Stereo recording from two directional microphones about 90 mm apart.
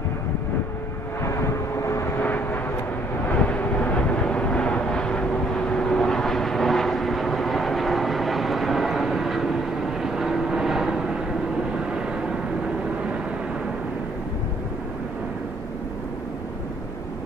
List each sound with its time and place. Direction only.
1.2 s vehicle: 35° left (ahead or behind)
2.2 s vehicle: 20° left (ahead or behind); by 12.4 s 10° right (ahead or behind)